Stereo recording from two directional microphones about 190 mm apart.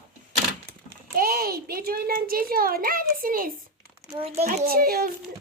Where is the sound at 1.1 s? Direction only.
50° right (ahead or behind).